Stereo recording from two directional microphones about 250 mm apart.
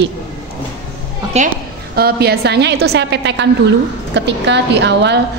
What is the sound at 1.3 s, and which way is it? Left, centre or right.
Speech, right.